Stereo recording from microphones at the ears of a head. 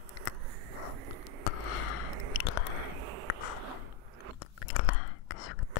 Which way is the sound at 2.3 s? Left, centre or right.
Left.